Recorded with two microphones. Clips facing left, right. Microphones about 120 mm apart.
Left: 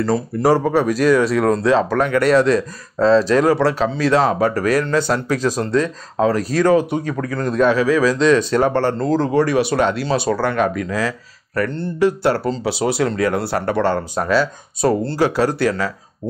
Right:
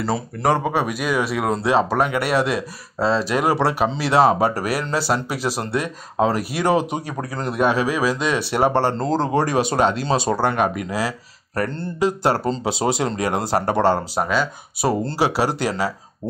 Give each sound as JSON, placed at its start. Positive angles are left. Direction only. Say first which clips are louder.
{"t": 0.0, "sound": "speech", "louder": "left 4 dB", "side_deg": 0}
{"t": 7.2, "sound": "speech", "louder": "left 4 dB", "side_deg": -30}
{"t": 7.4, "sound": "speech", "louder": "left 4 dB", "side_deg": -15}
{"t": 8.7, "sound": "speech", "louder": "left 2 dB", "side_deg": -25}
{"t": 9.5, "sound": "speech", "louder": "left 2 dB", "side_deg": -20}
{"t": 12.4, "sound": "speech", "louder": "left 1 dB", "side_deg": -25}
{"t": 13.8, "sound": "speech", "louder": "even", "side_deg": -10}